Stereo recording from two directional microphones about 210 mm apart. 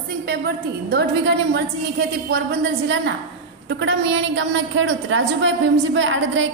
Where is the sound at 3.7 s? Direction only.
60° right (ahead or behind).